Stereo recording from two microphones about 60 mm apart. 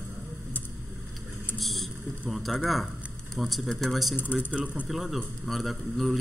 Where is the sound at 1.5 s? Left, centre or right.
Centre.